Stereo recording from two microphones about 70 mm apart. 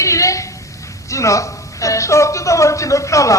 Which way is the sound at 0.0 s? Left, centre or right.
Left.